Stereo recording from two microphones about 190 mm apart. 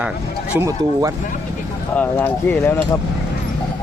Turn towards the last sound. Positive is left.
turn(degrees=10)  # may be behind; listen again after turning